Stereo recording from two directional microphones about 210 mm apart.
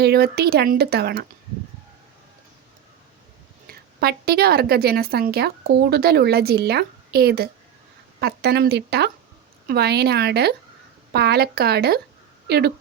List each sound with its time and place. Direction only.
0.0 s a woman's voice: 50° right (ahead or behind)
3.7 s a woman's voice: 50° right (ahead or behind)